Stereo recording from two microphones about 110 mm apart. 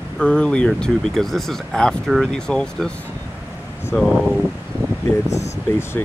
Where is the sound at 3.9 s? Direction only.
15° left (ahead or behind).